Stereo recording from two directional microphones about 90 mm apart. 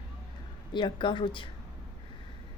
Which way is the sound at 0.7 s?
65° left (ahead or behind).